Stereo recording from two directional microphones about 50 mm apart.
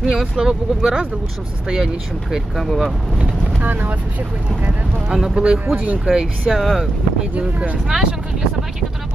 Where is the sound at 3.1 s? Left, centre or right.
Right.